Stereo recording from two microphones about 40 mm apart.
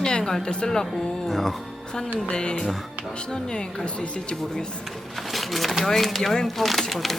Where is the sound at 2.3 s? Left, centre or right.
Left.